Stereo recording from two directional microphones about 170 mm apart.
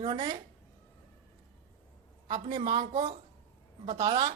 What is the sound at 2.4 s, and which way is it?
A woman's voice, 30° right (ahead or behind).